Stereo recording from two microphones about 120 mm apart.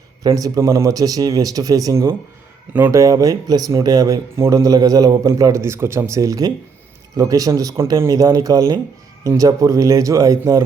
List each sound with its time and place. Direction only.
0.2 s speech: 30° right (ahead or behind)